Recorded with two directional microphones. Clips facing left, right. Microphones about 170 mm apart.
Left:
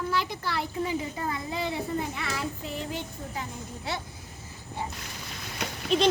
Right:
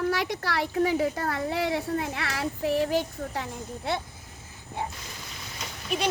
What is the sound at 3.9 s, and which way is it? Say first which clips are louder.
Speech: right 4 dB; 55° right (ahead or behind).